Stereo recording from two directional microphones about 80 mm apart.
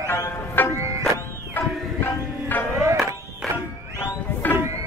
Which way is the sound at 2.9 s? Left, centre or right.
Right.